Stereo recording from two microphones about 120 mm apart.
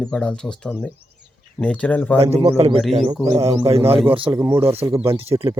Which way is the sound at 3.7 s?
55° right (ahead or behind).